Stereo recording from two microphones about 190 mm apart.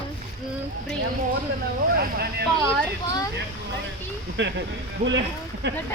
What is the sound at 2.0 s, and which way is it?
Vehicle, 55° right (ahead or behind).